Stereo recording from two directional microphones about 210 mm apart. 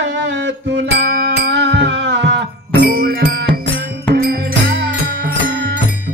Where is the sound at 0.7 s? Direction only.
50° right (ahead or behind).